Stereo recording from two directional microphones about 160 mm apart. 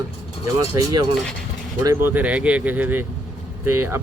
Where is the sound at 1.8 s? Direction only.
15° right (ahead or behind).